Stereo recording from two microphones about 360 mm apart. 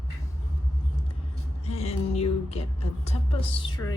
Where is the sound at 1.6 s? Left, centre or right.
Centre.